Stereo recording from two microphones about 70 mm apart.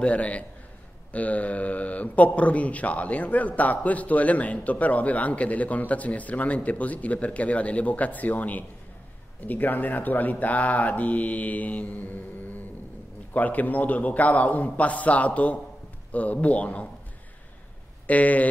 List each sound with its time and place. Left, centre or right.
0.0 s a man's voice: centre
18.0 s a man's voice: left